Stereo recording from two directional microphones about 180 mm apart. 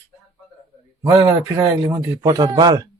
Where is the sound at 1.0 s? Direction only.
20° right (ahead or behind).